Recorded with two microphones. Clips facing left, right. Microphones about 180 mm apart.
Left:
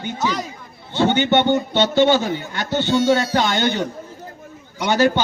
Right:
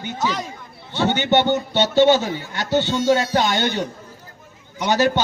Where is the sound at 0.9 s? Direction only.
15° left (ahead or behind).